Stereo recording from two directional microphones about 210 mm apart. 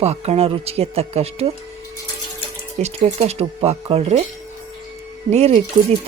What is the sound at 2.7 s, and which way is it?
Speech, 30° right (ahead or behind).